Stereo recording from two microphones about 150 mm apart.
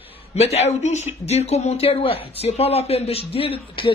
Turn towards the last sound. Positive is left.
turn(degrees=40)  # may be behind; listen again after turning